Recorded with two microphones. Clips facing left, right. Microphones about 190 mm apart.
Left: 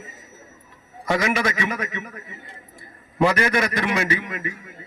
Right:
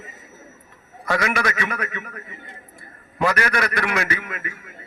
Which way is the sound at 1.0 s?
20° left (ahead or behind).